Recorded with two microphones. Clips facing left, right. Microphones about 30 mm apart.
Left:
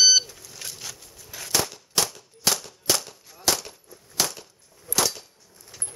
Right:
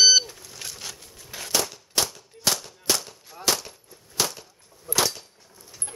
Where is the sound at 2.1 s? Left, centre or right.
Centre.